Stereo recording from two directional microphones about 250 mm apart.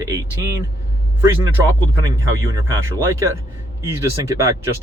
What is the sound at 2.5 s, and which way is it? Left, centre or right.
Speech, centre.